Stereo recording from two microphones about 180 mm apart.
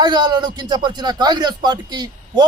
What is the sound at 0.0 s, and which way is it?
Speech, 25° right (ahead or behind).